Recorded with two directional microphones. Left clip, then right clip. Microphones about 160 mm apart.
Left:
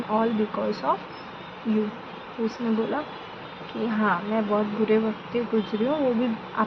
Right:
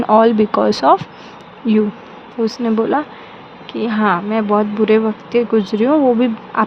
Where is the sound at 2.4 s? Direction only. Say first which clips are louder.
Right 10 dB; 90° right.